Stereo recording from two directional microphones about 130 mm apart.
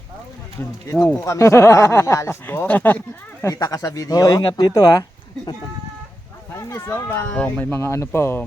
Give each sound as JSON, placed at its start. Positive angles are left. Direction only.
{"t": 0.6, "sound": "speech", "side_deg": 25}
{"t": 3.4, "sound": "speech", "side_deg": 30}
{"t": 6.6, "sound": "speech", "side_deg": 20}